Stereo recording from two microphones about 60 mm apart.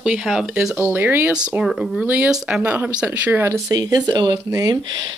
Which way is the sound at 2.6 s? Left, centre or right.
Right.